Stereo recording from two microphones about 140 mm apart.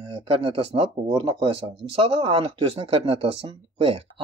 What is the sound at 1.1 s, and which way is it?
Speech, 35° right (ahead or behind).